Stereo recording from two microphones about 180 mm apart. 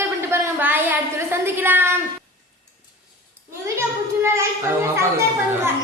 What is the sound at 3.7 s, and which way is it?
Children playing, 15° right (ahead or behind).